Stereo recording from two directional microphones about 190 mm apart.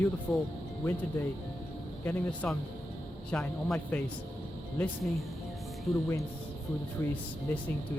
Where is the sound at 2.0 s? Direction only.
10° left (ahead or behind).